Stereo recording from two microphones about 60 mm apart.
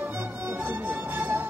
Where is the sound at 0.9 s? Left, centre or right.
Right.